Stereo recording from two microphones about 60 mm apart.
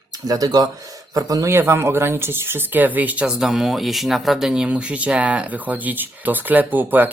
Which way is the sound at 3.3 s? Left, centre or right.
Centre.